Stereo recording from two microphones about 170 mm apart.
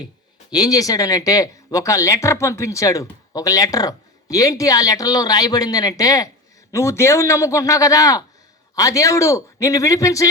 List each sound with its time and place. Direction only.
0.5 s speech: 20° left (ahead or behind)